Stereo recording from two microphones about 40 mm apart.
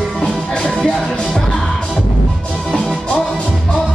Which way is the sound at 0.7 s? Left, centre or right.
Left.